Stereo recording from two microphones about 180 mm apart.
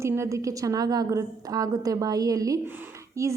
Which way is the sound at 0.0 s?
15° right (ahead or behind).